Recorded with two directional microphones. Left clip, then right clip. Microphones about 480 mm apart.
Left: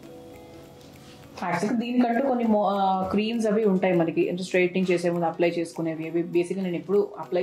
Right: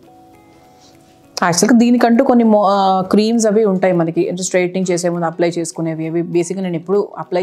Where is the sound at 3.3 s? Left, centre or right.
Right.